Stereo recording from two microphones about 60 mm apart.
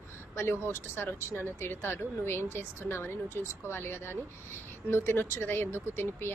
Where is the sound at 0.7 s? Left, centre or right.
Left.